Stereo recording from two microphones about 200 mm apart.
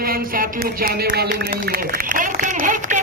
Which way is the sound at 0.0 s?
45° right (ahead or behind).